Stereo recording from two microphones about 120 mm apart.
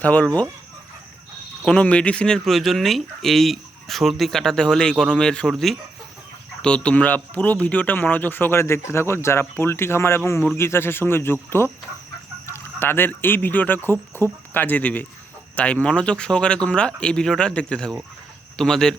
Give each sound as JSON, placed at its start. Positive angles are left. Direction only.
{"t": 0.0, "sound": "speech", "side_deg": 10}
{"t": 1.6, "sound": "speech", "side_deg": 10}